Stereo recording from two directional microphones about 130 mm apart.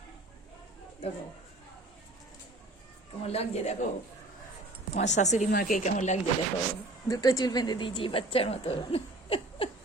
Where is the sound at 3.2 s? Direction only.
55° left (ahead or behind).